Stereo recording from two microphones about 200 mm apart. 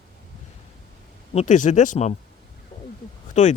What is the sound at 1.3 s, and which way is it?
Speech, 40° left (ahead or behind).